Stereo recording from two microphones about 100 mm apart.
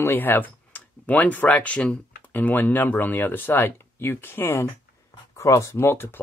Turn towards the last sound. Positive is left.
turn(degrees=25)  # may be behind; listen again after turning